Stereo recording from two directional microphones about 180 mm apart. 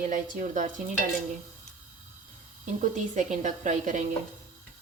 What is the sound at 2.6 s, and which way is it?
A woman's voice, 45° right (ahead or behind).